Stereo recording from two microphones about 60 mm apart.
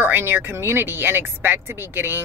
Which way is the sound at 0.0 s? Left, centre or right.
Right.